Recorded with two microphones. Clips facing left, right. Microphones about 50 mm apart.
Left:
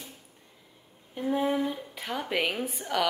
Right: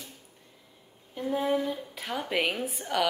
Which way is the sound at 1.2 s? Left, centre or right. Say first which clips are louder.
Left 1 dB; centre.